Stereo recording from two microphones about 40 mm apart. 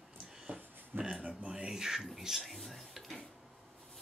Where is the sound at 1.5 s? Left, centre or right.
Centre.